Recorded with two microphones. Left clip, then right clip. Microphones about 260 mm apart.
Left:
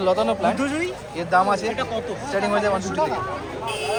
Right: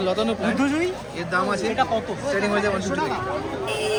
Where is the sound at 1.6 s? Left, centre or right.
Centre.